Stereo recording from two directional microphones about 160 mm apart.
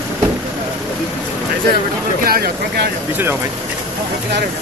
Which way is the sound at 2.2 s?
70° right (ahead or behind).